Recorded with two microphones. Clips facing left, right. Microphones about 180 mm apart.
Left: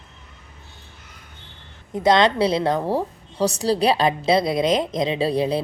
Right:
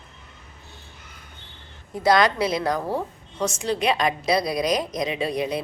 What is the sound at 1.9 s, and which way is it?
A woman's voice, 20° left (ahead or behind).